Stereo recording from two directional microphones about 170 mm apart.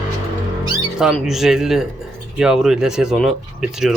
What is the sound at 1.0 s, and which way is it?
Speech, centre (ahead or behind).